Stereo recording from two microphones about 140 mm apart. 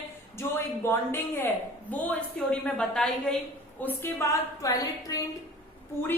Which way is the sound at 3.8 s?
15° left (ahead or behind).